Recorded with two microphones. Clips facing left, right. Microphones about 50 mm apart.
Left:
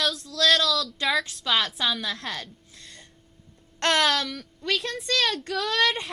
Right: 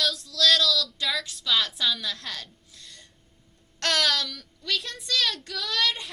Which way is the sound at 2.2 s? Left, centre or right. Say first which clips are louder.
Left 4 dB; left.